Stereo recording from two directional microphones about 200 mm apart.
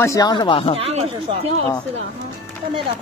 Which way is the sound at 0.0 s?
20° left (ahead or behind).